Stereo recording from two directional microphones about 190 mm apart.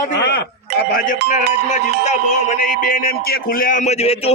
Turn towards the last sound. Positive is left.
turn(degrees=35)  # may be behind; listen again after turning